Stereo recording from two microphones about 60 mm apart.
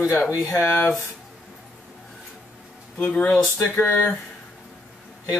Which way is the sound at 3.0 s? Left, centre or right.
Left.